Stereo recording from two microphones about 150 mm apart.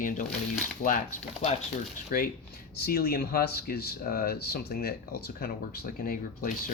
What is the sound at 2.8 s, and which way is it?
Speech, 90° left.